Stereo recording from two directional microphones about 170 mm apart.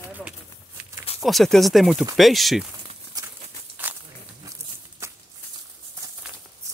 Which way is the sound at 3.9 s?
10° right (ahead or behind).